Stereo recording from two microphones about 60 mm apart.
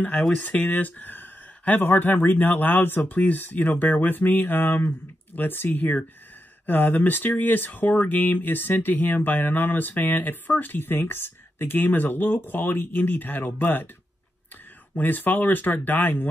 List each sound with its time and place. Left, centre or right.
0.4 s speech: left
15.0 s speech: left